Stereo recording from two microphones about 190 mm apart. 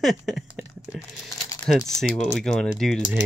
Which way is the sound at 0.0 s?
Centre (ahead or behind).